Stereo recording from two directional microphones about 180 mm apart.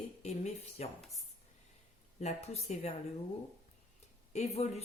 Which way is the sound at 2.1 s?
40° left (ahead or behind).